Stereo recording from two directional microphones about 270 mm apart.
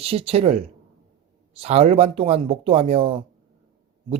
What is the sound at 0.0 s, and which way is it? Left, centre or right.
A man's voice, right.